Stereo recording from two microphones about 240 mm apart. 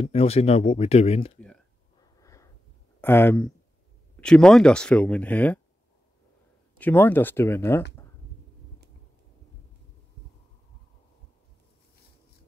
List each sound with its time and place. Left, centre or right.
0.0 s speech: left
3.0 s speech: centre
6.8 s speech: centre